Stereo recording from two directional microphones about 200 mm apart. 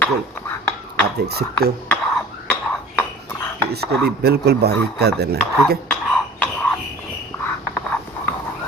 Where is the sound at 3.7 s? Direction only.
55° right (ahead or behind).